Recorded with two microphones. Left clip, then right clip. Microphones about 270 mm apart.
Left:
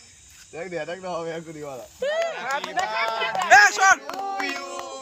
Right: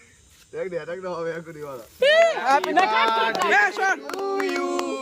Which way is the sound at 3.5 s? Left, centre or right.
Centre.